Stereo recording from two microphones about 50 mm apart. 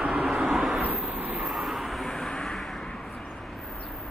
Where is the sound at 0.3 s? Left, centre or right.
Centre.